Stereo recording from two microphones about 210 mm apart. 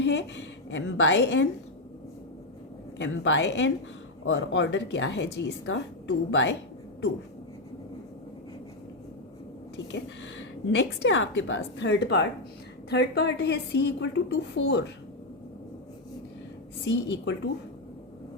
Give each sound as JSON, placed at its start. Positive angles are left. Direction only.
{"t": 0.0, "sound": "a woman's voice", "side_deg": 55}
{"t": 3.0, "sound": "a woman's voice", "side_deg": 60}
{"t": 9.7, "sound": "a woman's voice", "side_deg": 60}
{"t": 16.8, "sound": "a woman's voice", "side_deg": 55}